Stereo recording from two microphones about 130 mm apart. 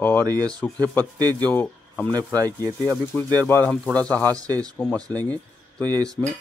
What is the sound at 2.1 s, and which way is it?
Speech, 30° right (ahead or behind).